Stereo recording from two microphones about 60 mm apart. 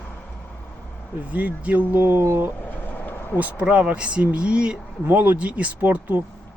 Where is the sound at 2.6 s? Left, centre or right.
Left.